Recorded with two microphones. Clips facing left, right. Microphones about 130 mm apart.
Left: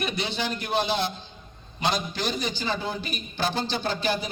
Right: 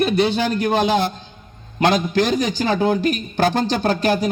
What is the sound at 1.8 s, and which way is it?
Speech, 90° right.